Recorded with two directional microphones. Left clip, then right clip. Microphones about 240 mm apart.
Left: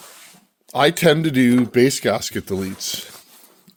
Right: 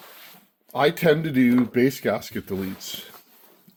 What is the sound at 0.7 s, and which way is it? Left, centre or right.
Speech, left.